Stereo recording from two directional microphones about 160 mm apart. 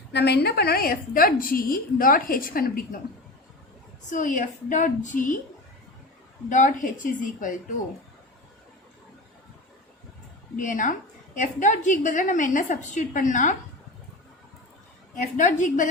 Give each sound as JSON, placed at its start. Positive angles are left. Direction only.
{"t": 0.1, "sound": "a woman's voice", "side_deg": 90}
{"t": 4.1, "sound": "a woman's voice", "side_deg": 55}
{"t": 6.5, "sound": "a woman's voice", "side_deg": 50}
{"t": 10.6, "sound": "a woman's voice", "side_deg": 55}
{"t": 15.4, "sound": "a woman's voice", "side_deg": 50}